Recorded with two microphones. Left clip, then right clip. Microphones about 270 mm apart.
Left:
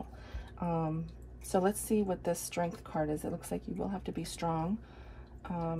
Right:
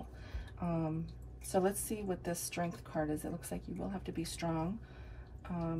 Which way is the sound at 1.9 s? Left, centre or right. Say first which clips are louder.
Left 7 dB; left.